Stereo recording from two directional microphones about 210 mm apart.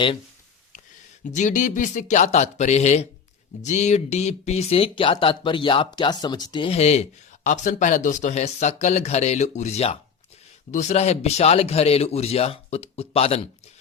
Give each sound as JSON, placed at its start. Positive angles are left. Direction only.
{"t": 1.2, "sound": "speech", "side_deg": 35}